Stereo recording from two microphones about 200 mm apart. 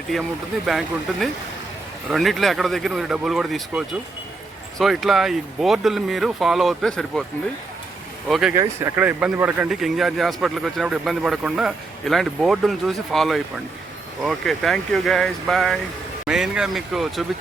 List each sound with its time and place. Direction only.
0.1 s speech: centre (ahead or behind)
8.3 s speech: 5° right (ahead or behind)
8.5 s speech: 15° right (ahead or behind)